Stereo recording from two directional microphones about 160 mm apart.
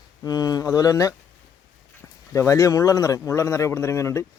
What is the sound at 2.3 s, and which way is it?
Speech, 20° left (ahead or behind).